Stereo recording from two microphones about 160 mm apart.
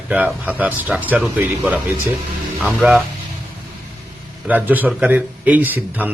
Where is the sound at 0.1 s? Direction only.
10° right (ahead or behind).